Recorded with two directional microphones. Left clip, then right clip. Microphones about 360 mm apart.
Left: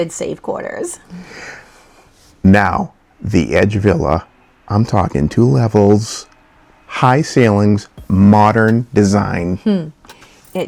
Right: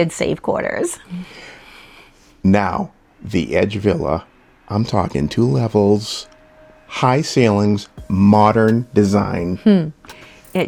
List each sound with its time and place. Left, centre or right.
0.0 s speech: right
1.4 s a sound: left
2.4 s speech: left
9.6 s speech: centre